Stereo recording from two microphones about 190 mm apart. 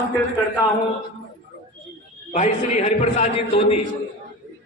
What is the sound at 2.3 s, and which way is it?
A man's voice, 35° left (ahead or behind).